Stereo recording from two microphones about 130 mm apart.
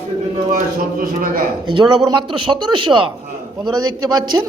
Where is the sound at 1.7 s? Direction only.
35° right (ahead or behind).